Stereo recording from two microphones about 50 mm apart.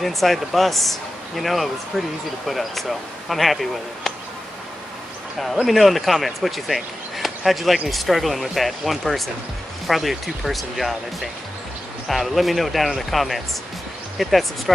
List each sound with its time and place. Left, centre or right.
0.0 s speech: centre
5.6 s speech: centre